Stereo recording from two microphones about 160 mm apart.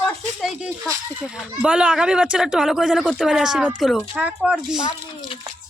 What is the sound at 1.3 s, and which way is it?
Speech, 5° right (ahead or behind).